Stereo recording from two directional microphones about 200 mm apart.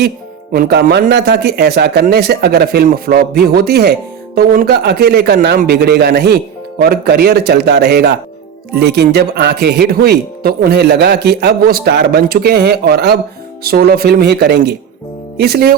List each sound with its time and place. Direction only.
0.5 s speech: 50° right (ahead or behind)